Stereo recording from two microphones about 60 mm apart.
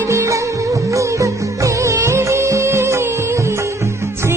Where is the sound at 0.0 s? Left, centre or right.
Right.